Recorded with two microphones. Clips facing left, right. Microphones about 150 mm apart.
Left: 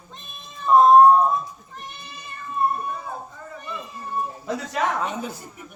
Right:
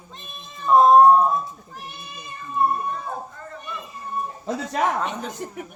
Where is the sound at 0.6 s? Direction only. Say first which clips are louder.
Even; centre (ahead or behind).